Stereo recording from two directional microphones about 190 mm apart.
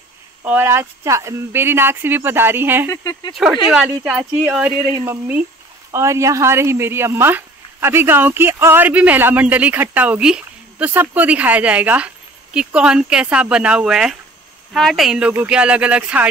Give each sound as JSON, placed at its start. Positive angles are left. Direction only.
{"t": 0.4, "sound": "speech", "side_deg": -10}
{"t": 2.9, "sound": "speech", "side_deg": 20}
{"t": 3.7, "sound": "speech", "side_deg": -5}